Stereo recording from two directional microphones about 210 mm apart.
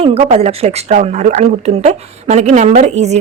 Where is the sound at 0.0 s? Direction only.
30° right (ahead or behind).